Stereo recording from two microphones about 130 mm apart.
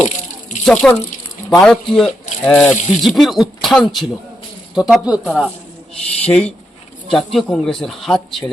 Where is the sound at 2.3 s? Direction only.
75° left (ahead or behind).